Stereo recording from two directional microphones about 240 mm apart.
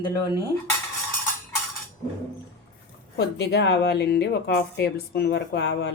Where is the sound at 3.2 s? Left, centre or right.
Left.